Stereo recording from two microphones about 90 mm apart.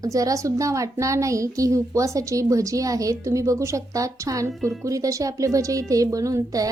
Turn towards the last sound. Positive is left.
turn(degrees=-40)  # may be behind; listen again after turning